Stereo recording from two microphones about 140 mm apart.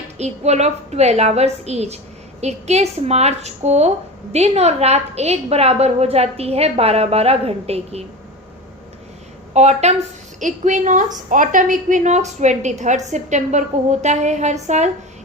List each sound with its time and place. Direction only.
0.2 s a woman's voice: 55° right (ahead or behind)
9.5 s a woman's voice: 50° right (ahead or behind)
10.4 s a woman's voice: 65° right (ahead or behind)